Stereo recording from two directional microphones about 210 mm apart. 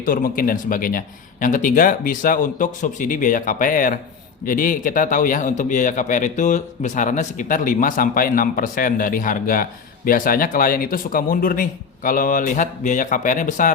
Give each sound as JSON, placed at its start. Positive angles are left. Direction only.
{"t": 0.0, "sound": "a man's voice", "side_deg": 40}